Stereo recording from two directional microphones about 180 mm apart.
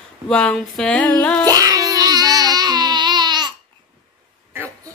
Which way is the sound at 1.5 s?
20° right (ahead or behind).